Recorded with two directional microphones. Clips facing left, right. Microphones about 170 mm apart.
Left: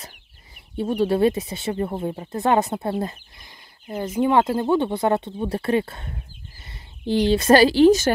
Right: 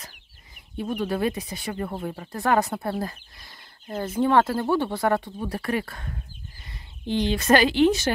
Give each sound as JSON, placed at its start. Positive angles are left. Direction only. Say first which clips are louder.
{"t": 0.7, "sound": "speech", "louder": "left 6 dB", "side_deg": 30}